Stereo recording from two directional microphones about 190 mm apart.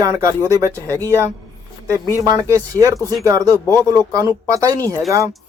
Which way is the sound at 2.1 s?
20° right (ahead or behind).